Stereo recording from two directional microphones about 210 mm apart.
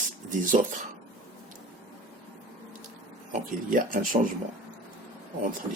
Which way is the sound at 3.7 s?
40° right (ahead or behind).